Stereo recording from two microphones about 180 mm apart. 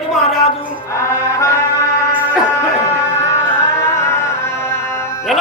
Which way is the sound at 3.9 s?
15° left (ahead or behind).